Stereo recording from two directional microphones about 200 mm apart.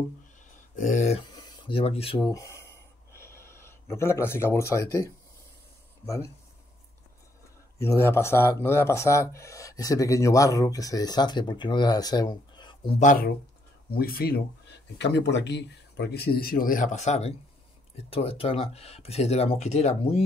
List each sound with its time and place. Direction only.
0.7 s speech: 40° left (ahead or behind)
1.3 s a sound: 25° left (ahead or behind)
7.8 s speech: 10° left (ahead or behind)
13.0 s speech: 40° left (ahead or behind)